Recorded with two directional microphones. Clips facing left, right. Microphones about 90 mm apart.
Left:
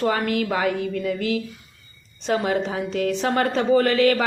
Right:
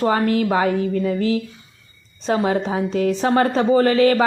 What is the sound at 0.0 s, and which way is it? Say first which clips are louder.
A woman's voice: right 4 dB; 30° right (ahead or behind).